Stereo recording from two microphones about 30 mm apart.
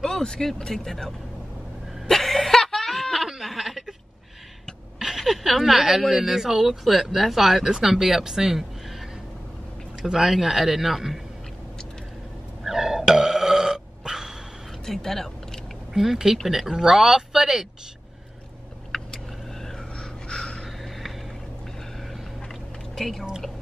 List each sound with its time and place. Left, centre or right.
0.2 s speech: centre
2.0 s a sound: centre
3.2 s snicker: centre
3.4 s a sound: centre
4.9 s a woman's voice: centre
10.1 s a woman's voice: centre
12.6 s burping: centre
14.9 s a sound: centre
15.9 s a woman's voice: centre
18.9 s vehicle: left
20.0 s a sound: left
22.9 s speech: centre